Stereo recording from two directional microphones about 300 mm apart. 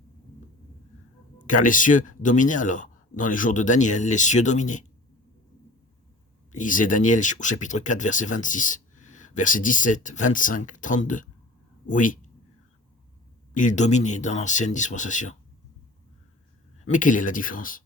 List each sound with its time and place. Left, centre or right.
1.5 s speech: left
6.5 s speech: left
13.5 s speech: left
16.8 s speech: left